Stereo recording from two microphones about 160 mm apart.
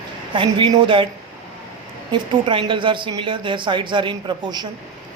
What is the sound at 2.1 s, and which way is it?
Speech, 30° right (ahead or behind).